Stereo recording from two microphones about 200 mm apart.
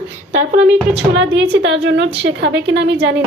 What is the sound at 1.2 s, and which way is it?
A woman's voice, 65° right (ahead or behind).